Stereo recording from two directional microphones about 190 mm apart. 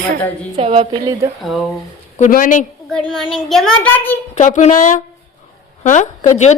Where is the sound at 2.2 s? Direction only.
45° left (ahead or behind).